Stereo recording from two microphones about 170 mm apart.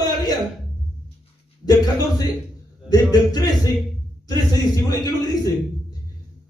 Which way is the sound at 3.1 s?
25° left (ahead or behind).